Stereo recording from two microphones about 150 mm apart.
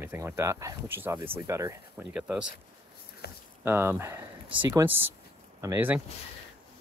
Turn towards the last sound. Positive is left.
turn(degrees=-15)  # may be behind; listen again after turning